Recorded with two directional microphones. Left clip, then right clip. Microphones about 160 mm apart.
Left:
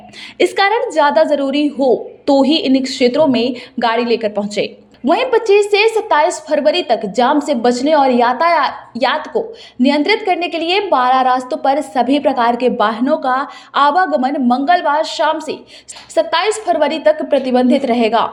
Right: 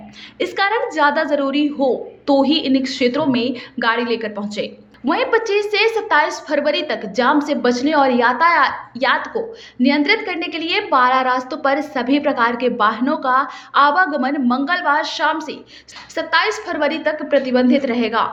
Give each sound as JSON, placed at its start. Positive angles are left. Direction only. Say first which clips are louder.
{"t": 0.3, "sound": "a woman's voice", "louder": "left 5 dB", "side_deg": 50}